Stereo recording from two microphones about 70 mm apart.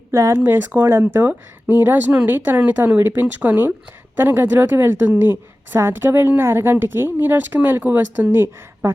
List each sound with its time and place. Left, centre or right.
0.1 s speech: right
0.3 s a woman's voice: right